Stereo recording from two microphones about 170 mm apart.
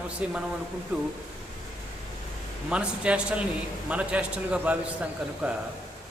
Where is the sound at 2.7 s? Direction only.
5° right (ahead or behind).